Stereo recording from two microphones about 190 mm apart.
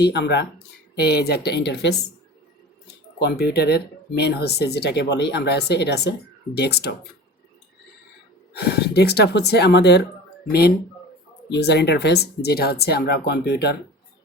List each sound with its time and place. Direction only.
0.0 s speech: 65° left (ahead or behind)
8.5 s speech: 60° left (ahead or behind)
11.5 s speech: 65° left (ahead or behind)